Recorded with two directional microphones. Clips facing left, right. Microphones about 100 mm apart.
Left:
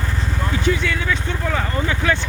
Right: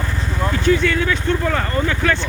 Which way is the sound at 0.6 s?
5° left (ahead or behind).